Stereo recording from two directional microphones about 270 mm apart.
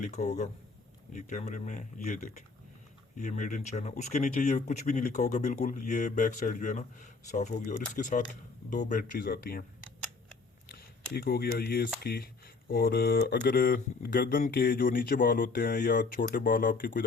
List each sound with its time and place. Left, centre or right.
0.0 s speech: left
10.7 s speech: left